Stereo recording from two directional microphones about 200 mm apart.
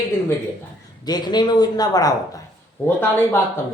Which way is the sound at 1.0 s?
20° left (ahead or behind).